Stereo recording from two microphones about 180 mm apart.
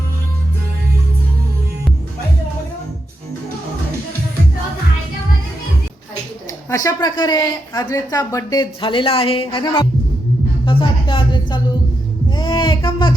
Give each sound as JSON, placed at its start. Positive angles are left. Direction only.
{"t": 6.7, "sound": "a woman's voice", "side_deg": 20}